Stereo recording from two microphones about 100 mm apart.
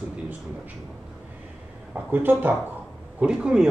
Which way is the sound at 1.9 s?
20° right (ahead or behind).